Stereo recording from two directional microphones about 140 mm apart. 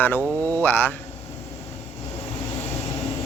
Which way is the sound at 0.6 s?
15° left (ahead or behind).